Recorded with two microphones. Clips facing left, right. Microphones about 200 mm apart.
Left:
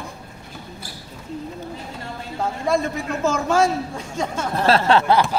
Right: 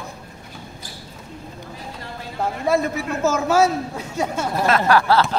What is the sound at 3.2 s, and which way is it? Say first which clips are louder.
A woman's voice: right 1 dB; 5° right (ahead or behind).